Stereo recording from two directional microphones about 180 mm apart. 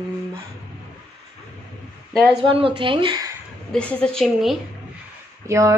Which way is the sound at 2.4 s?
30° right (ahead or behind).